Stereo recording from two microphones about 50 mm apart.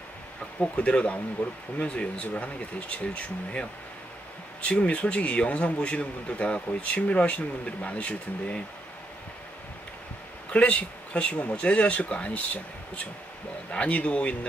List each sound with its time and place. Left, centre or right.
0.6 s speech: left
4.6 s speech: left
10.5 s speech: left
13.7 s speech: left